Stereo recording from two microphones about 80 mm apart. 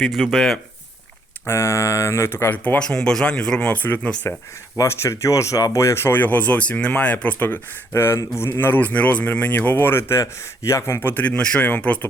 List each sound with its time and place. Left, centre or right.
0.1 s speech: centre
1.5 s speech: left
2.7 s speech: centre
4.8 s speech: left; by 11.9 s centre